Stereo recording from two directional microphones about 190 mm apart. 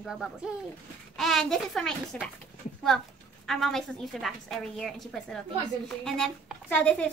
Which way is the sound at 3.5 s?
Centre (ahead or behind).